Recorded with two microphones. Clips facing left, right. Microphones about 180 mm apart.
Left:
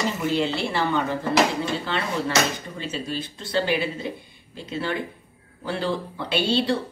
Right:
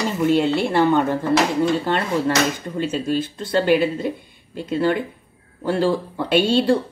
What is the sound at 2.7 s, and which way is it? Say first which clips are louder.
A woman's voice: right 8 dB; 50° right (ahead or behind).